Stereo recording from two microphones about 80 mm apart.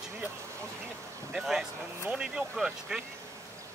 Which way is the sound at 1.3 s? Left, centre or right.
Centre.